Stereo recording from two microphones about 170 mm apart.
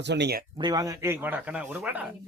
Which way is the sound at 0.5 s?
25° right (ahead or behind).